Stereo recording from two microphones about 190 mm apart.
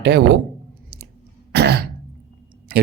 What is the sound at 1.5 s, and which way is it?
Throat clearing, 60° right (ahead or behind).